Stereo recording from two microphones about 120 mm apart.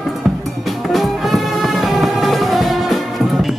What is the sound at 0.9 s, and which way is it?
Music, centre (ahead or behind).